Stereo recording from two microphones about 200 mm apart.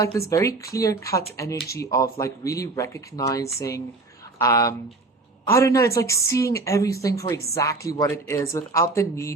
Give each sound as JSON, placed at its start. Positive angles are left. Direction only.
{"t": 0.0, "sound": "a woman's voice", "side_deg": 15}